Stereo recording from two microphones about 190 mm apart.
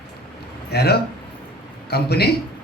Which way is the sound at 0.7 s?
55° left (ahead or behind).